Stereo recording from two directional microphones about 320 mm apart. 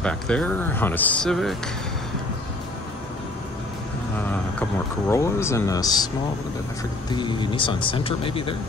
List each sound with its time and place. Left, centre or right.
0.0 s speech: centre
5.1 s speech: centre
7.1 s speech: centre